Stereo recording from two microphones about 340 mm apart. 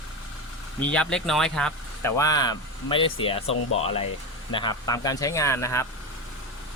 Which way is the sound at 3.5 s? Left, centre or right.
Left.